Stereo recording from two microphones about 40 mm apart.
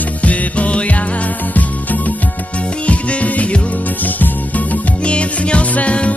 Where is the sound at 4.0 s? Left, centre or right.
Left.